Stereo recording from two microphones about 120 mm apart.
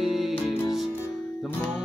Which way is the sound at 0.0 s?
Centre (ahead or behind).